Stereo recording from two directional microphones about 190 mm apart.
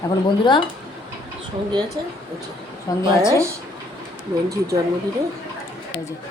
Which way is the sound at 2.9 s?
20° left (ahead or behind).